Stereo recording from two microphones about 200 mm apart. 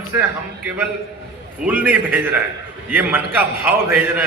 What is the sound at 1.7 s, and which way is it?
A man's voice, 10° right (ahead or behind).